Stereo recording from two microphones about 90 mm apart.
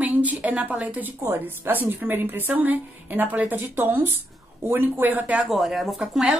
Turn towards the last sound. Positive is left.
turn(degrees=-5)  # may be behind; listen again after turning